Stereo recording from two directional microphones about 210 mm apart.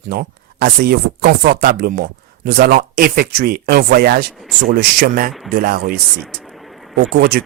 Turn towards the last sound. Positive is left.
turn(degrees=-45)  # may be behind; listen again after turning